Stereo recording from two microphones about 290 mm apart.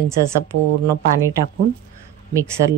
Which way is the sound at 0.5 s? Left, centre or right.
Right.